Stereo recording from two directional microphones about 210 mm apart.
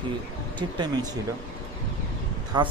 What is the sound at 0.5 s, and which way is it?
Speech, 20° right (ahead or behind).